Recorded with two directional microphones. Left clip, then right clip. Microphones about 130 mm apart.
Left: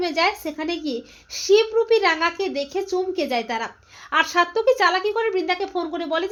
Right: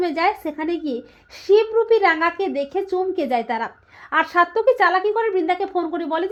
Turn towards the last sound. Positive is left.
turn(degrees=-40)  # may be behind; listen again after turning